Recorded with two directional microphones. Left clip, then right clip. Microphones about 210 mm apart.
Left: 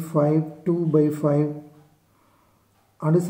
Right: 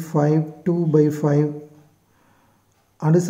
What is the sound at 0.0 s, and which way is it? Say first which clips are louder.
A man's voice: right 1 dB; 30° right (ahead or behind).